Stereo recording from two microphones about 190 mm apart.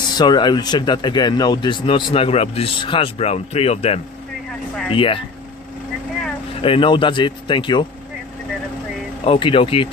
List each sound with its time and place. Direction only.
0.1 s speech: 20° left (ahead or behind)
6.5 s speech: 30° left (ahead or behind)
9.2 s speech: 25° left (ahead or behind)